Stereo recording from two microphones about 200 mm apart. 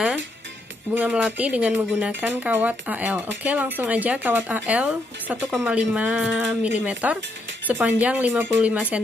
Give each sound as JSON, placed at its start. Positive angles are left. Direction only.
{"t": 0.9, "sound": "speech", "side_deg": -5}